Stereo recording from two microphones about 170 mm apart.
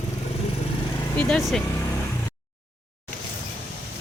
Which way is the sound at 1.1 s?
5° left (ahead or behind).